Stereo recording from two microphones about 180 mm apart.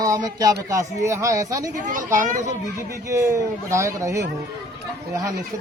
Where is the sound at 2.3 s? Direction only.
45° right (ahead or behind).